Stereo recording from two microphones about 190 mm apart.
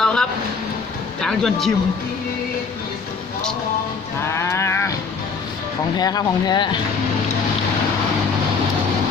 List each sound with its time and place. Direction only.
0.0 s music: 5° left (ahead or behind)
1.2 s speech: 5° left (ahead or behind)
4.3 s livestock: 15° left (ahead or behind)
6.0 s speech: 20° left (ahead or behind)